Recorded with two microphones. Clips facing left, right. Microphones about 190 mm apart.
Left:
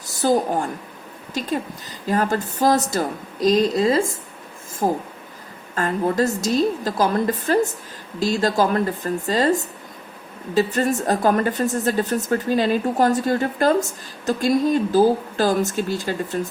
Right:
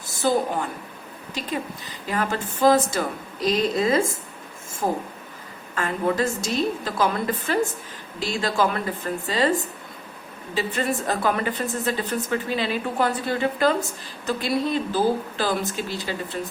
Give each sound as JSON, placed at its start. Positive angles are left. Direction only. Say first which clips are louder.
{"t": 0.0, "sound": "a woman's voice", "louder": "left 3 dB", "side_deg": 40}